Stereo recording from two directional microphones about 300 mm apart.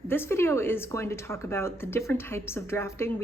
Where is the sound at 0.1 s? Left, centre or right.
Centre.